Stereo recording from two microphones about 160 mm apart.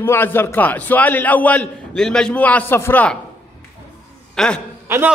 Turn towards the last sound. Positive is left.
turn(degrees=-15)  # may be behind; listen again after turning